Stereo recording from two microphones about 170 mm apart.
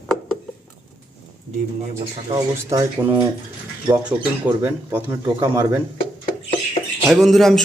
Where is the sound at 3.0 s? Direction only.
10° right (ahead or behind).